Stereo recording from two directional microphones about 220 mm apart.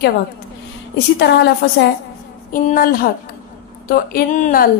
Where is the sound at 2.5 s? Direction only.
40° left (ahead or behind).